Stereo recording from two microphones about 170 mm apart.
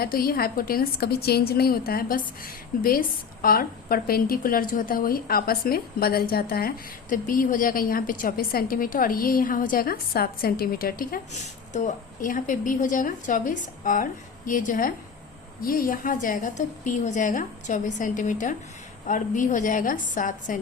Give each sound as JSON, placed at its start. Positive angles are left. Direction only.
{"t": 0.0, "sound": "a woman's voice", "side_deg": 60}